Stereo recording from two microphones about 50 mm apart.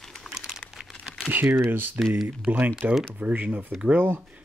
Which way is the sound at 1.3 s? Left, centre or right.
Right.